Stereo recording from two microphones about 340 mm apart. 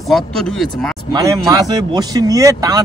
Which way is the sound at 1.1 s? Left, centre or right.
Centre.